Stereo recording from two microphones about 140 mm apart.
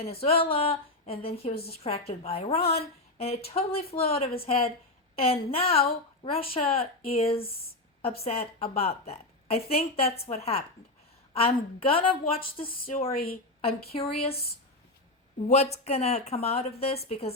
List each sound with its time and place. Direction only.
0.0 s a woman's voice: 45° left (ahead or behind)
12.2 s speech: 90° left
13.6 s a woman's voice: 45° left (ahead or behind)
15.4 s a woman's voice: 50° left (ahead or behind)